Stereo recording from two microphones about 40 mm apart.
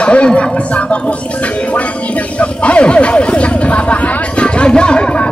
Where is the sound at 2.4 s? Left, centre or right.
Left.